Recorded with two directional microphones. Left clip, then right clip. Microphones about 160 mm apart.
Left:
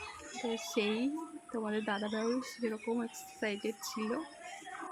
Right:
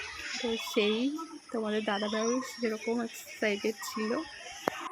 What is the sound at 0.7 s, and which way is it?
Speech, 10° right (ahead or behind).